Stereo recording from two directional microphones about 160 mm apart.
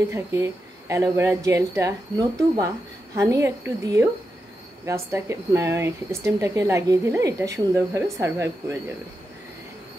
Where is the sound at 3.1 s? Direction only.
20° right (ahead or behind).